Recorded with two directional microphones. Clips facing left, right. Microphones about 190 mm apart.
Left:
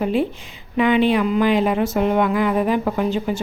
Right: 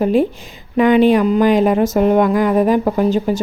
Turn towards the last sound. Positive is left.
turn(degrees=-40)  # may be behind; listen again after turning